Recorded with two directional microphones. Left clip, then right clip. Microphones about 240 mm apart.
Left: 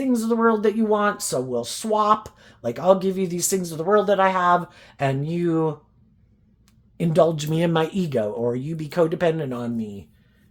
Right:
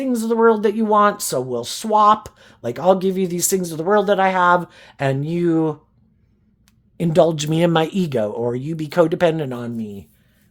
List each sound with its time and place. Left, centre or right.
0.0 s speech: right
6.9 s speech: right